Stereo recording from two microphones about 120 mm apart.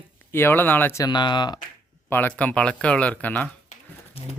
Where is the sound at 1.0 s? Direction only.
40° left (ahead or behind).